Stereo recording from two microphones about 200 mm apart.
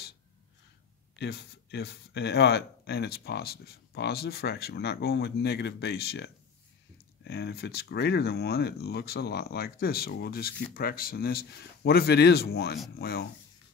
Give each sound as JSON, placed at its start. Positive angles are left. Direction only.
{"t": 1.1, "sound": "speech", "side_deg": 60}